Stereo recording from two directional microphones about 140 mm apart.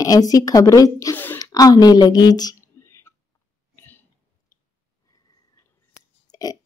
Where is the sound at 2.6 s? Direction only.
20° left (ahead or behind).